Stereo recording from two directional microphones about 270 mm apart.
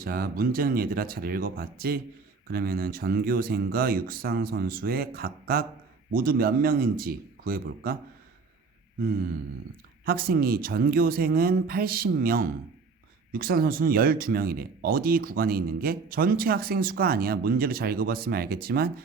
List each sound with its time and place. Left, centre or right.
0.0 s speech: right
10.1 s speech: right